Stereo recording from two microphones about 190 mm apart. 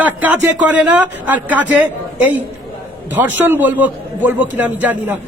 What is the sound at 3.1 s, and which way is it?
A man's voice, 10° right (ahead or behind).